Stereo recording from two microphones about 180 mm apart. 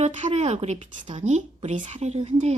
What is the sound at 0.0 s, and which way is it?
A woman's voice, 40° right (ahead or behind).